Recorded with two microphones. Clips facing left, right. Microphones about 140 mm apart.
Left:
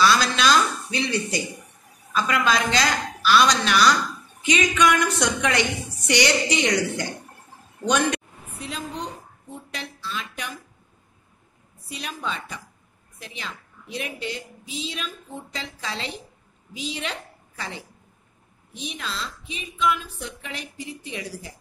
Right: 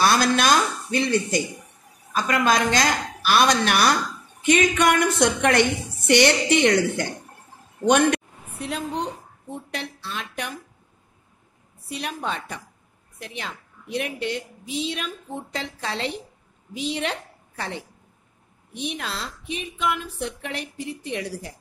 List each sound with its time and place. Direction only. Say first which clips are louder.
0.0 s a woman's voice: right 1 dB; 50° right (ahead or behind)
8.1 s a woman's voice: right 4 dB; 60° right (ahead or behind)
11.9 s a woman's voice: right 3 dB; 55° right (ahead or behind)